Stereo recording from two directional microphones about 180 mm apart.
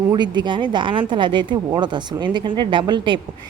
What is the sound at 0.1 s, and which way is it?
Speech, 25° right (ahead or behind).